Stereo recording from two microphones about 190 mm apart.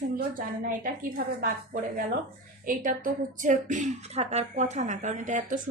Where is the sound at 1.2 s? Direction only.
50° right (ahead or behind).